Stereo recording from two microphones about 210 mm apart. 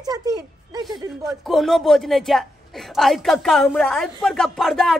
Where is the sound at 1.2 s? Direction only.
Centre (ahead or behind).